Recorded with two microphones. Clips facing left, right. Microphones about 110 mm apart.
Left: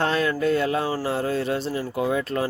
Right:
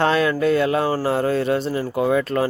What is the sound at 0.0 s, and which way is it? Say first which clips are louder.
Mantra: right 4 dB; 90° right.